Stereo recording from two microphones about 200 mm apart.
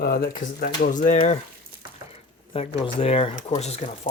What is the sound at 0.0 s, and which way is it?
Speech, 50° left (ahead or behind).